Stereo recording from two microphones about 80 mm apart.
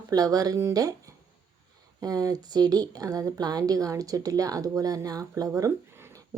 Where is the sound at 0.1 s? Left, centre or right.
Right.